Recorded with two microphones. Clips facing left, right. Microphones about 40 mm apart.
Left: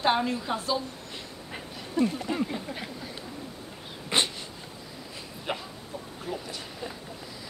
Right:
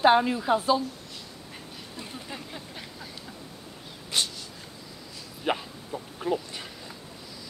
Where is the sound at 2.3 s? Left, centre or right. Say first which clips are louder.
Left 8 dB; centre.